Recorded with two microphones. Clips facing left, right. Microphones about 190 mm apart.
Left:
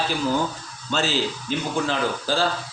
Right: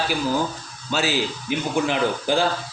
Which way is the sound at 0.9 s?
10° right (ahead or behind).